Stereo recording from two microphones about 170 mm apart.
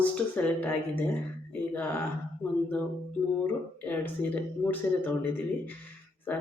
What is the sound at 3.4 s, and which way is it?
Speech, 10° left (ahead or behind).